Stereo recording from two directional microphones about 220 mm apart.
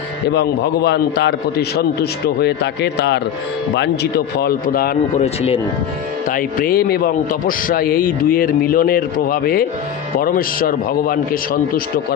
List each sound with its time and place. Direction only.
0.3 s a man's voice: 50° left (ahead or behind)
5.2 s speech: 25° left (ahead or behind)
6.3 s a man's voice: 40° left (ahead or behind)